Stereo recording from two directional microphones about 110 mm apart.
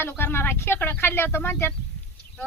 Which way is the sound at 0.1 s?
20° left (ahead or behind).